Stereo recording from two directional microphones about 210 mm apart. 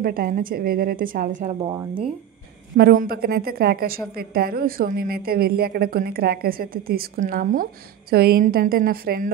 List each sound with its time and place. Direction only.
0.0 s a woman's voice: 45° right (ahead or behind)
1.5 s speech: 25° right (ahead or behind)
2.8 s a woman's voice: 45° right (ahead or behind)